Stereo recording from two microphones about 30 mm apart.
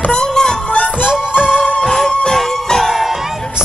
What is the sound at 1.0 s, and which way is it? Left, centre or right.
Music, right.